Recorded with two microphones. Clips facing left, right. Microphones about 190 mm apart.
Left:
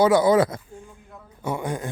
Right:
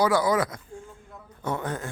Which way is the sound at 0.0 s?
25° left (ahead or behind).